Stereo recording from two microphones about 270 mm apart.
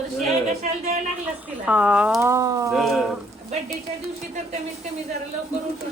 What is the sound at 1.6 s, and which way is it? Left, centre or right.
Speech, centre.